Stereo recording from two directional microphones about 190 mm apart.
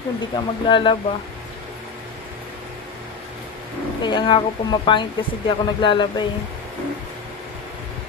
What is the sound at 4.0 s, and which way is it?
Speech, 25° left (ahead or behind).